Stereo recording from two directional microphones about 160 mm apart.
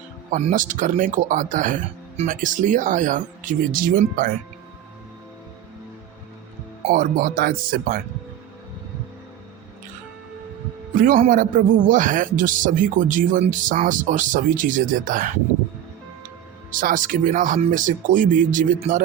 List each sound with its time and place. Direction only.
0.3 s speech: 50° right (ahead or behind)
6.8 s speech: 60° right (ahead or behind)
10.9 s a man's voice: 60° right (ahead or behind)
16.7 s speech: 55° right (ahead or behind)